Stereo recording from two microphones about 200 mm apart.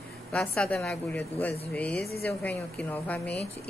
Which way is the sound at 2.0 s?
50° left (ahead or behind).